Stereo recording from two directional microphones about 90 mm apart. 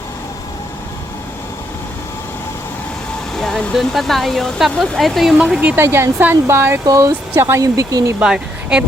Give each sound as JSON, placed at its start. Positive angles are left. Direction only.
{"t": 3.3, "sound": "speech", "side_deg": 5}
{"t": 5.5, "sound": "speech", "side_deg": -15}
{"t": 5.8, "sound": "speech", "side_deg": -25}
{"t": 6.8, "sound": "speech", "side_deg": -35}
{"t": 7.6, "sound": "speech", "side_deg": -40}
{"t": 8.2, "sound": "speech", "side_deg": -10}